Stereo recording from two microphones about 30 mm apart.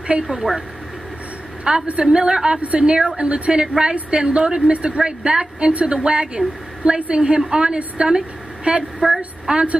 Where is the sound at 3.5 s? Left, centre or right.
Right.